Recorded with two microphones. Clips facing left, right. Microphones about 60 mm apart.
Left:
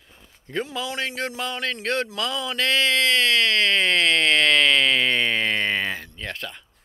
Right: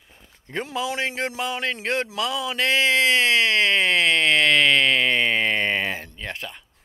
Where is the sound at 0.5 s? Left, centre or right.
Right.